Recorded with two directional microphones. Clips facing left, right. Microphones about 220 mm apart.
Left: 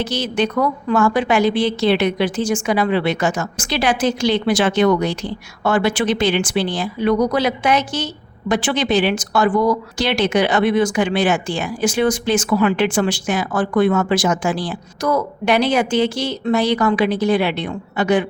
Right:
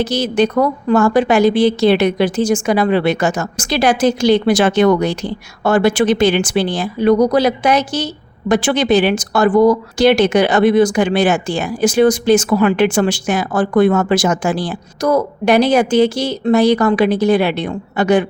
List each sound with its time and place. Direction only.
0.0 s a woman's voice: 40° right (ahead or behind)